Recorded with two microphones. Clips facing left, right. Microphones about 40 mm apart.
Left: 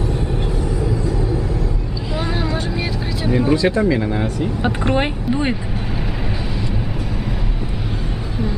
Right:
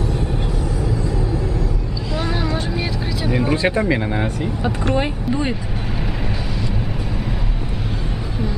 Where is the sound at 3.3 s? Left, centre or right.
Centre.